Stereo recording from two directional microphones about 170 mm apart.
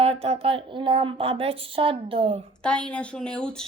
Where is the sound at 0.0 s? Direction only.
35° right (ahead or behind).